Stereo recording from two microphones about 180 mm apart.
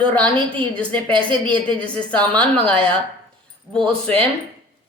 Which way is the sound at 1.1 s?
25° right (ahead or behind).